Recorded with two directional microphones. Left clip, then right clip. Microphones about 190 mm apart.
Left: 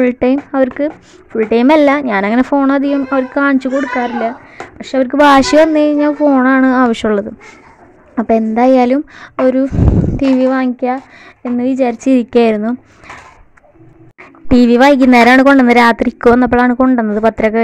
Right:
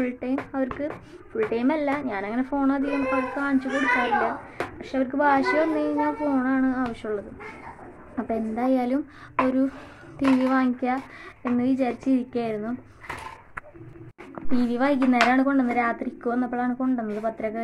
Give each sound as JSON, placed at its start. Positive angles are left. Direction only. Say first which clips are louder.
{"t": 0.0, "sound": "a woman's voice", "louder": "left 16 dB", "side_deg": 55}
{"t": 4.7, "sound": "a woman's voice", "louder": "left 15 dB", "side_deg": 55}
{"t": 14.5, "sound": "a woman's voice", "louder": "left 16 dB", "side_deg": 50}